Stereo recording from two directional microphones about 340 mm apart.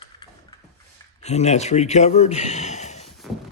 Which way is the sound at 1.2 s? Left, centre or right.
Centre.